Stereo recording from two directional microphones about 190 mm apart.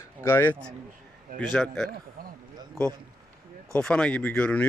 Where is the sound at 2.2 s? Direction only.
50° right (ahead or behind).